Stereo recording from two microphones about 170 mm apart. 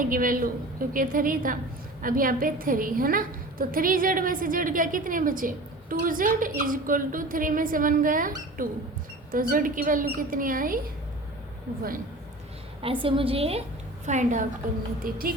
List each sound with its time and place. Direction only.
0.0 s a woman's voice: 55° right (ahead or behind)
12.8 s a woman's voice: 30° right (ahead or behind); by 15.2 s 55° right (ahead or behind)